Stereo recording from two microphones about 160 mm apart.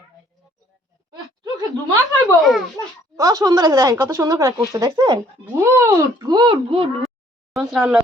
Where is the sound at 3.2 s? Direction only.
20° right (ahead or behind).